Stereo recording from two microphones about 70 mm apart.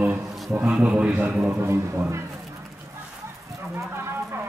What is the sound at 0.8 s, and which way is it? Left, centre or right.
Speech, centre.